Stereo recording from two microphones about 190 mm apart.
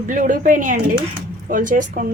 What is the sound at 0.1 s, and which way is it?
Speech, 45° right (ahead or behind).